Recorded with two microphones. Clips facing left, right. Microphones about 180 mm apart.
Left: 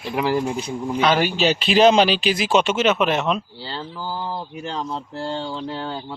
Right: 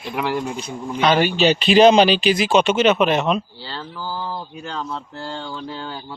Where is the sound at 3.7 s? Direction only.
20° left (ahead or behind).